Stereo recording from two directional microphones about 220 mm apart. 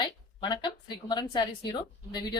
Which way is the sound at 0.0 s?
20° left (ahead or behind).